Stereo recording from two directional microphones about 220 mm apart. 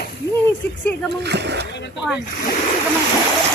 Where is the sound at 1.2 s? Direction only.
50° right (ahead or behind).